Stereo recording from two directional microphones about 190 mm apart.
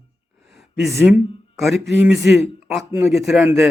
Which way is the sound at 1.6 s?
Centre (ahead or behind).